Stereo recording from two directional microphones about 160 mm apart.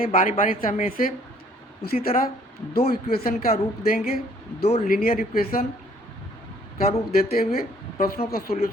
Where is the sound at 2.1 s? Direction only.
40° left (ahead or behind).